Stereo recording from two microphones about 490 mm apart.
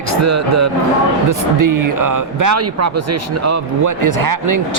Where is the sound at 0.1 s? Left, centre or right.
Right.